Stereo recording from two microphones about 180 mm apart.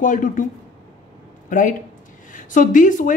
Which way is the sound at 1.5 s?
45° left (ahead or behind).